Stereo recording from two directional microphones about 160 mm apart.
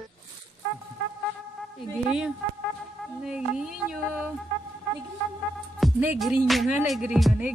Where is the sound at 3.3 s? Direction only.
5° right (ahead or behind).